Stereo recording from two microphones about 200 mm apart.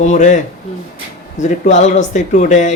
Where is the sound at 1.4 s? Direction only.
35° left (ahead or behind).